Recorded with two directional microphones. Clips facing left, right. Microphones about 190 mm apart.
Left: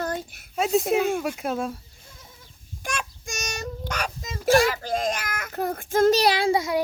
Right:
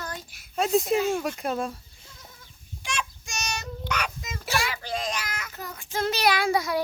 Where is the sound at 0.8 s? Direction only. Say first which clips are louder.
Left 2 dB; 55° left (ahead or behind).